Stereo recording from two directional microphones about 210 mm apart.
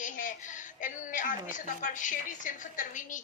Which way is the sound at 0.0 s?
40° left (ahead or behind).